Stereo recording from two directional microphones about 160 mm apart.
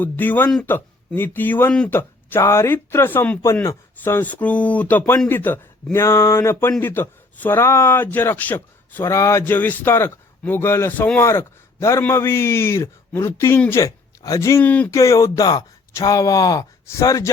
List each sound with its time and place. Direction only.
0.0 s speech: 10° left (ahead or behind)
14.9 s speech: 20° left (ahead or behind)